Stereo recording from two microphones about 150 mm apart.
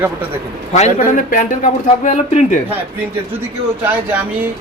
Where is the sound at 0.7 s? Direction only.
55° left (ahead or behind).